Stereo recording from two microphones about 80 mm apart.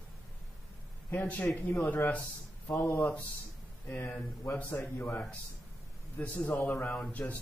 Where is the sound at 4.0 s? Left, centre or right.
Centre.